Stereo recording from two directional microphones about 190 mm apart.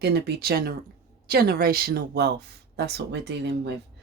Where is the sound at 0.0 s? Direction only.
55° right (ahead or behind).